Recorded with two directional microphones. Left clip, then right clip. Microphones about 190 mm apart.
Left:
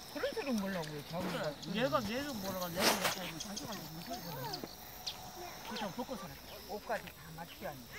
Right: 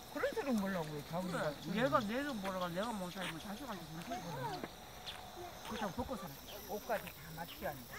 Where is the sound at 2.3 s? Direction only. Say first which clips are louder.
Even; centre (ahead or behind).